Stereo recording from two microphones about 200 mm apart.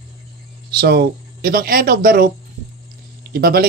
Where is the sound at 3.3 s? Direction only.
50° right (ahead or behind).